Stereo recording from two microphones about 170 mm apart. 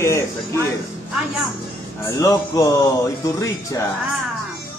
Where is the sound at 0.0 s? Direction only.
15° left (ahead or behind).